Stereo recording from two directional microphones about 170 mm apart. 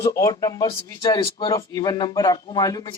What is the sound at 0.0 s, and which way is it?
Speech, 20° left (ahead or behind).